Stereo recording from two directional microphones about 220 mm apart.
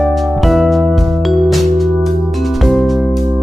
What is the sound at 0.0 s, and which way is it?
Music, centre (ahead or behind).